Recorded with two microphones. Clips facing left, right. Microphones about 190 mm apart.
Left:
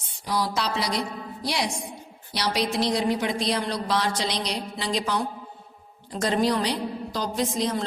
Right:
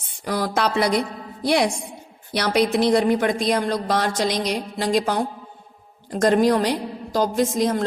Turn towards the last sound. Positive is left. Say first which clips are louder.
# right 5 dB
turn(degrees=-50)  # may be behind; listen again after turning